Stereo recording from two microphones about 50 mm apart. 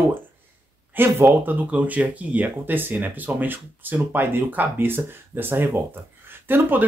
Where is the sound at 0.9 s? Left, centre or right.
Right.